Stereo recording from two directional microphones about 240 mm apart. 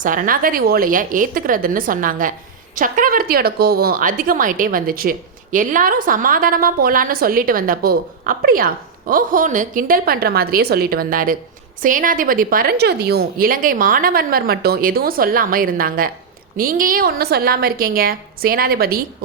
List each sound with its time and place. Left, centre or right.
0.0 s speech: right